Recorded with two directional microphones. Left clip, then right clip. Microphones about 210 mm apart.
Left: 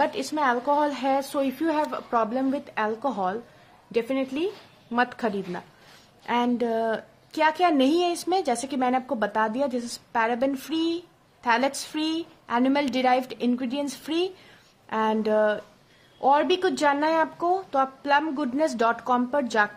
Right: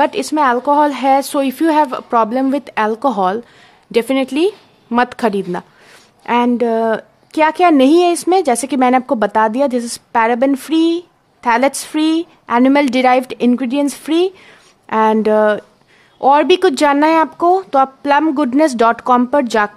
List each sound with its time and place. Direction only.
0.0 s a woman's voice: 40° right (ahead or behind)